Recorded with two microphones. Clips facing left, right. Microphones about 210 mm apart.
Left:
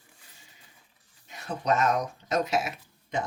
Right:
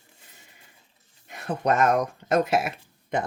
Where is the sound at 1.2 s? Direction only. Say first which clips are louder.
Right 3 dB; 55° right (ahead or behind).